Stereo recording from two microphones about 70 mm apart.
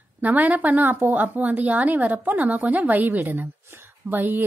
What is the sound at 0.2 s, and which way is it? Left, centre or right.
A woman's voice, right.